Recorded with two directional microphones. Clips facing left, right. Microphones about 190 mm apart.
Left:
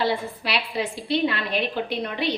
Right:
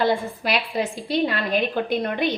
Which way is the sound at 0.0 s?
45° right (ahead or behind).